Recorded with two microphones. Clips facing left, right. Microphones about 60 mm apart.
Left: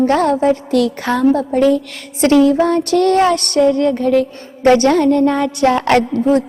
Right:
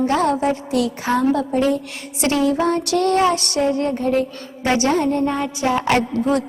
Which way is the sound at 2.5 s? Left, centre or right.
Left.